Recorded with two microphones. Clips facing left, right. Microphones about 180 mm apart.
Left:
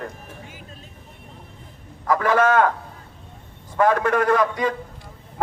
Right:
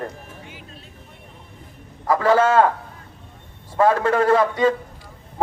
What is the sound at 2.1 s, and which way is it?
Speech, 30° right (ahead or behind).